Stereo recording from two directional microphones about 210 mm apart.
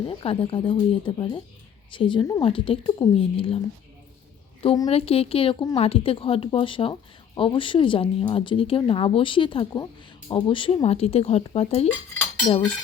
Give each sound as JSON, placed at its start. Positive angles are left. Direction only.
{"t": 0.2, "sound": "a woman's voice", "side_deg": 25}
{"t": 4.6, "sound": "a woman's voice", "side_deg": 25}